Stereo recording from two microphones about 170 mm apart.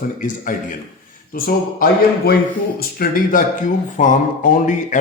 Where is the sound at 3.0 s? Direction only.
55° left (ahead or behind).